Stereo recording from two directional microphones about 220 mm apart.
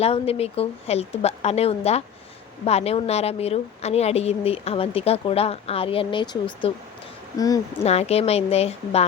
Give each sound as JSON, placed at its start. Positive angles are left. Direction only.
{"t": 0.0, "sound": "a woman's voice", "side_deg": 25}
{"t": 7.9, "sound": "a woman's voice", "side_deg": 30}